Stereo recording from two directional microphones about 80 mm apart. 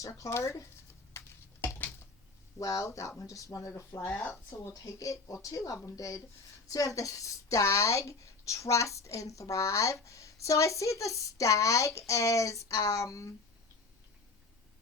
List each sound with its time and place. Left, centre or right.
0.0 s a woman's voice: left
1.2 s a sound: left
2.6 s a woman's voice: left
4.0 s speech: left
4.7 s a woman's voice: left